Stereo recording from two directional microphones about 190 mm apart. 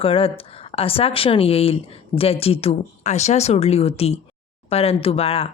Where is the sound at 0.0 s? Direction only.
30° left (ahead or behind).